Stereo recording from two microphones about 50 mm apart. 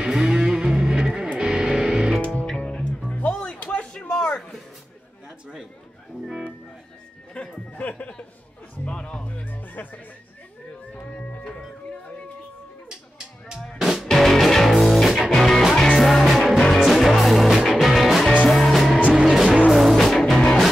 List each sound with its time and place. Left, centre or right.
0.0 s music: centre
2.4 s music: centre
7.4 s music: left
8.0 s chuckle: left
8.8 s music: left
9.8 s music: left
11.0 s music: left
13.7 s music: centre
15.3 s music: centre